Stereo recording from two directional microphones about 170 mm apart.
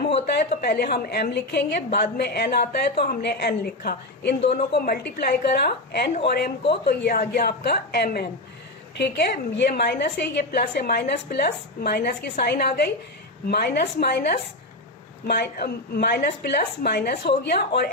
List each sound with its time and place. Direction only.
0.0 s a sound: 40° left (ahead or behind)
0.3 s a woman's voice: 65° left (ahead or behind)
4.5 s a woman's voice: 60° left (ahead or behind)
9.0 s a woman's voice: 80° left